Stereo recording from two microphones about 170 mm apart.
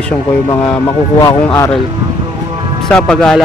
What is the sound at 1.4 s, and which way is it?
Speech, 15° left (ahead or behind).